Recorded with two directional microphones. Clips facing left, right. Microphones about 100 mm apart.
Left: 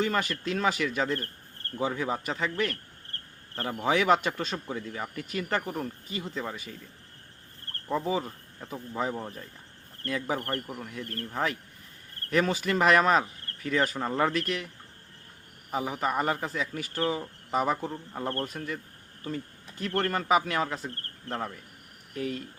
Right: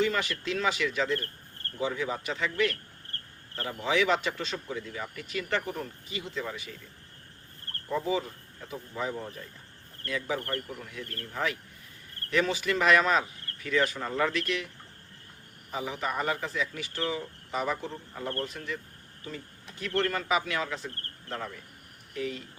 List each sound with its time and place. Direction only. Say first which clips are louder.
0.0 s speech: even; 45° left (ahead or behind)
8.0 s speech: even; 45° left (ahead or behind)
15.7 s speech: left 4 dB; 45° left (ahead or behind)
22.1 s speech: left 1 dB; 50° left (ahead or behind)